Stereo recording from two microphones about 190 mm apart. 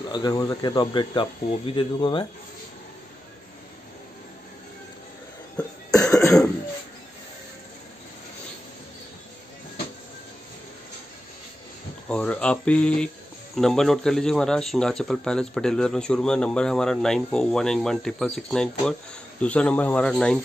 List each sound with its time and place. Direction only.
0.1 s speech: 20° left (ahead or behind)
5.6 s cough: 5° left (ahead or behind)
5.9 s cough: 15° left (ahead or behind)
12.1 s a man's voice: 5° left (ahead or behind)